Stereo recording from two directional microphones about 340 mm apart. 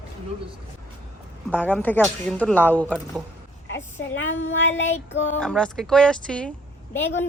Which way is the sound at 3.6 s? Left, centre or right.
Left.